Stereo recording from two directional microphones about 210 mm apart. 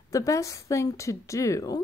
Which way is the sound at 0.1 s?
15° left (ahead or behind).